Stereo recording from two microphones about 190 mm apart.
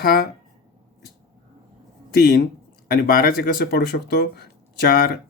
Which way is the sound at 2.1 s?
55° left (ahead or behind).